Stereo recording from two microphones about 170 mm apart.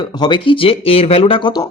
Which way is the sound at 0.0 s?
25° left (ahead or behind).